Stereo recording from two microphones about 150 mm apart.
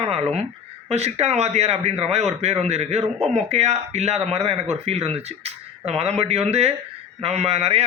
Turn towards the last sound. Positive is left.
turn(degrees=-45)  # may be behind; listen again after turning